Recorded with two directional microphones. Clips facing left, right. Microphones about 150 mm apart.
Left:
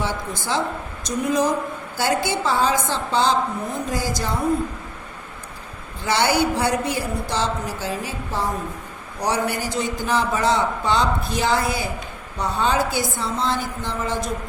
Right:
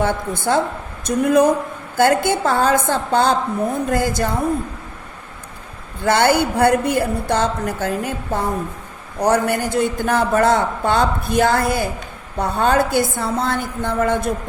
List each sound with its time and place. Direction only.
0.0 s a woman's voice: 55° right (ahead or behind)
6.0 s a man's voice: 50° right (ahead or behind)